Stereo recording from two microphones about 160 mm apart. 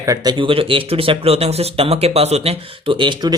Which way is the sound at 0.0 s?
25° right (ahead or behind).